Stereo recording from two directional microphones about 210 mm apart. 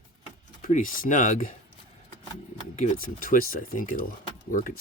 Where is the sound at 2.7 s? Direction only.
40° left (ahead or behind).